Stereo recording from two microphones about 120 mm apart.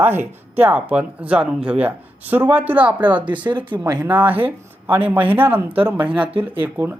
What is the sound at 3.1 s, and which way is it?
Speech, 40° right (ahead or behind).